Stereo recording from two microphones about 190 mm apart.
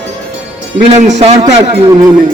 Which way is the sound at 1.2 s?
35° right (ahead or behind).